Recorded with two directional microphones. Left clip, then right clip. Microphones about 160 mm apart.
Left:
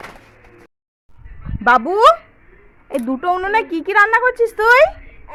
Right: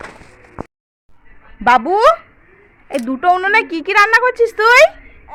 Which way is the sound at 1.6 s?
10° left (ahead or behind).